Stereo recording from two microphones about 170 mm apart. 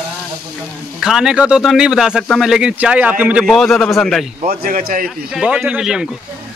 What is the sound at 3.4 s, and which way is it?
Speech, centre (ahead or behind).